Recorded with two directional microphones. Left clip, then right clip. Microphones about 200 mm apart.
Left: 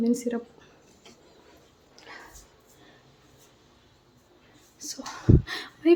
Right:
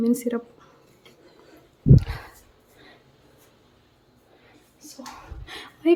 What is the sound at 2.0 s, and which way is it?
Speech, 20° right (ahead or behind).